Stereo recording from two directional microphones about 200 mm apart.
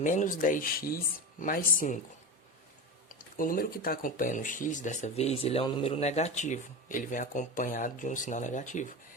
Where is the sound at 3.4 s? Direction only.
45° left (ahead or behind).